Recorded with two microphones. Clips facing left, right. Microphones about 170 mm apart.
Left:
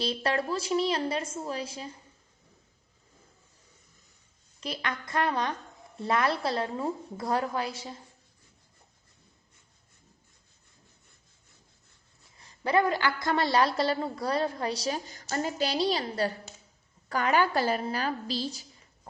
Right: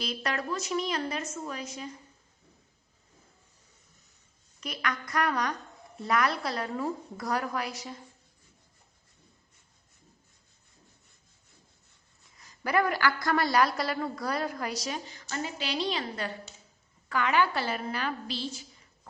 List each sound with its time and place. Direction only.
0.0 s a woman's voice: 30° left (ahead or behind)
4.6 s a woman's voice: 30° left (ahead or behind)
12.4 s a woman's voice: 25° left (ahead or behind)